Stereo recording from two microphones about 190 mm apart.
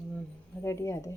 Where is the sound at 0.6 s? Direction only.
15° left (ahead or behind).